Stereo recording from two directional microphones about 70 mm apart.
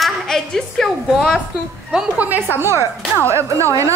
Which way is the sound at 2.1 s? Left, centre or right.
Right.